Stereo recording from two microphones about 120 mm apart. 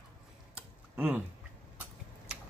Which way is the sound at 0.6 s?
10° right (ahead or behind).